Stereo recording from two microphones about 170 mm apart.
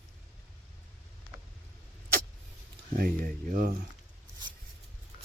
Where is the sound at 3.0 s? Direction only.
55° right (ahead or behind).